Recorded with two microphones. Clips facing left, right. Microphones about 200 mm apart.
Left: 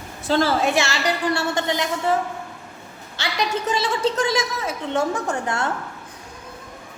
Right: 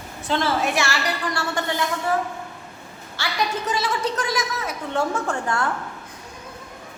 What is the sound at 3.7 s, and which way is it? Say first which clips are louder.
A woman's voice: left 3 dB; 25° left (ahead or behind).